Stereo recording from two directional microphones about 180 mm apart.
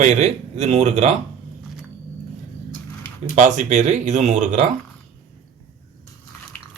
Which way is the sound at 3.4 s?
40° right (ahead or behind).